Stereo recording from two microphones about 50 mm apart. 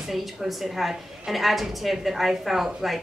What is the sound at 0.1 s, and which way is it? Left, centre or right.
A woman's voice, centre.